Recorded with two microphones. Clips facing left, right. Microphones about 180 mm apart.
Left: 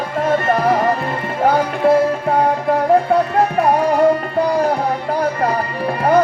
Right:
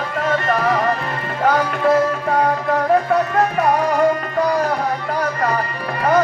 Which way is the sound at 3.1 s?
30° left (ahead or behind).